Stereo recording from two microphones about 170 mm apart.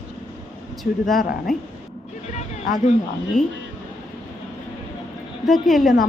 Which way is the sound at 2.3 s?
45° left (ahead or behind).